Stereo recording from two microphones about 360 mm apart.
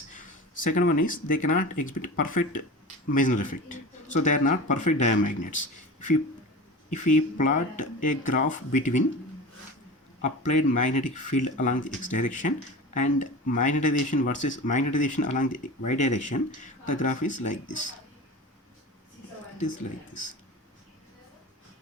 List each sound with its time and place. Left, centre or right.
0.2 s speech: left
6.9 s speech: left
10.2 s speech: left